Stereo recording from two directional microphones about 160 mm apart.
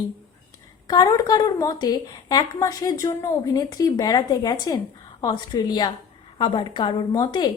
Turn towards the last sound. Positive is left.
turn(degrees=25)  # may be behind; listen again after turning